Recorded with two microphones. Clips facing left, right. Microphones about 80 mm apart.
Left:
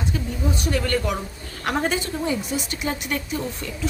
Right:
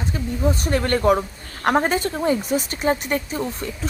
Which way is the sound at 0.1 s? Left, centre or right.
Right.